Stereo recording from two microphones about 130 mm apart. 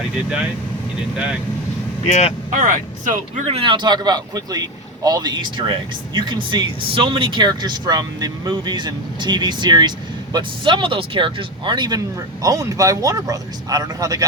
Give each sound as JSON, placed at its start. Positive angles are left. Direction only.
{"t": 1.1, "sound": "speech", "side_deg": -10}
{"t": 2.5, "sound": "speech", "side_deg": -85}
{"t": 3.4, "sound": "speech", "side_deg": -45}